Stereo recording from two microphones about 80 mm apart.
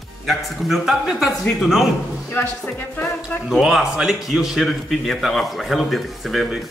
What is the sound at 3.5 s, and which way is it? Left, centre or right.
A man's voice, centre.